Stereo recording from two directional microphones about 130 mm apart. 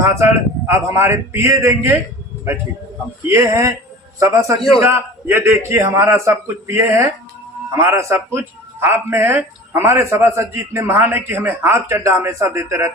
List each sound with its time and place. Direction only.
0.0 s speech: 20° right (ahead or behind)
3.2 s speech: 20° right (ahead or behind)